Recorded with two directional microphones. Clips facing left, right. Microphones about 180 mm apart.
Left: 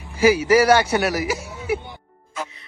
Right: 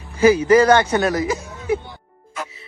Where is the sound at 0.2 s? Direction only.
10° left (ahead or behind).